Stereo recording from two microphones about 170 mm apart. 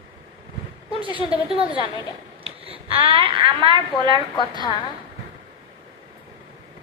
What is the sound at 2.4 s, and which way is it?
A woman's voice, 35° right (ahead or behind).